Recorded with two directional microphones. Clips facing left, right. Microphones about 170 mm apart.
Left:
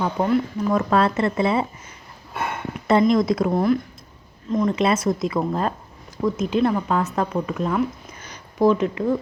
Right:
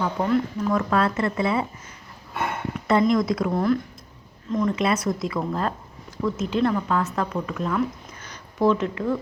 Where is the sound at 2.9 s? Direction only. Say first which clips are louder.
Left 3 dB; 25° left (ahead or behind).